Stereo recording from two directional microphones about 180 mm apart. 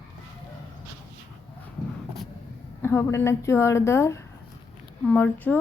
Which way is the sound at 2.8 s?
15° left (ahead or behind).